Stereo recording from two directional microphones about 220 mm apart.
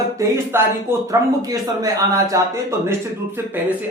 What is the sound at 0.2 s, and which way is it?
Speech, 10° right (ahead or behind).